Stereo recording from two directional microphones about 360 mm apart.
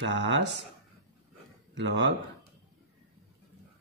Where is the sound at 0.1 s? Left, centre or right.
Right.